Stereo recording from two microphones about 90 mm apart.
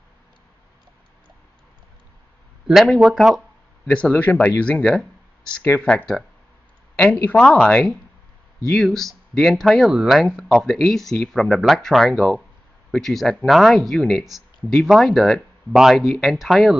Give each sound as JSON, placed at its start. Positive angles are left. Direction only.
{"t": 2.6, "sound": "speech", "side_deg": 0}
{"t": 3.8, "sound": "speech", "side_deg": 15}
{"t": 7.2, "sound": "speech", "side_deg": 10}